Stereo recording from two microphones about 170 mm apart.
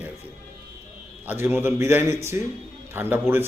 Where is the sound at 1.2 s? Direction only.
10° right (ahead or behind).